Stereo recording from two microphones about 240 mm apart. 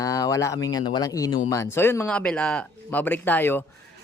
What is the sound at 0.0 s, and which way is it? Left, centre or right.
Speech, centre.